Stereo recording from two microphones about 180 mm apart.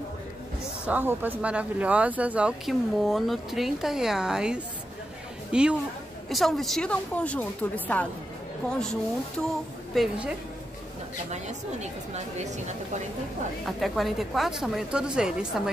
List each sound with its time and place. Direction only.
0.8 s a woman's voice: 10° right (ahead or behind)
9.9 s speech: 5° right (ahead or behind)
11.2 s a woman's voice: 40° right (ahead or behind)
13.7 s speech: centre (ahead or behind)